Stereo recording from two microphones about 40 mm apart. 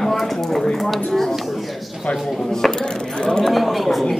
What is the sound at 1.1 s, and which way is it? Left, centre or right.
Speech, centre.